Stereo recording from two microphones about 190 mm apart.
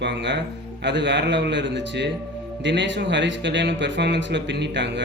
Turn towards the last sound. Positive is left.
turn(degrees=-70)  # may be behind; listen again after turning